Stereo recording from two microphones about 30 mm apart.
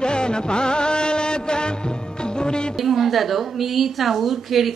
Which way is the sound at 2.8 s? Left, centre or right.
Centre.